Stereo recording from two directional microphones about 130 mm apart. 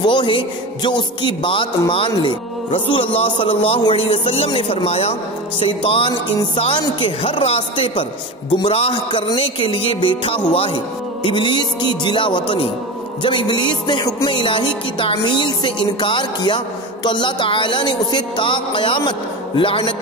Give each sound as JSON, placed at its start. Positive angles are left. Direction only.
{"t": 0.0, "sound": "music", "side_deg": 35}
{"t": 0.8, "sound": "speech", "side_deg": 40}
{"t": 9.3, "sound": "music", "side_deg": 40}
{"t": 10.5, "sound": "speech", "side_deg": 45}
{"t": 11.2, "sound": "music", "side_deg": 35}